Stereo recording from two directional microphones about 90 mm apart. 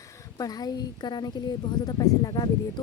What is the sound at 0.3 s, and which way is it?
A woman's voice, 45° left (ahead or behind).